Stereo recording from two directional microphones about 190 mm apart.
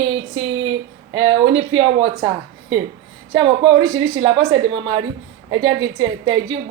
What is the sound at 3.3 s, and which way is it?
A woman's voice, 20° right (ahead or behind).